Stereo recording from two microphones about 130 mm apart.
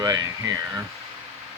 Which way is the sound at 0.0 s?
30° right (ahead or behind).